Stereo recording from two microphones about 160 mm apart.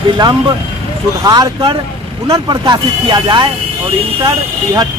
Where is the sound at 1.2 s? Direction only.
25° right (ahead or behind).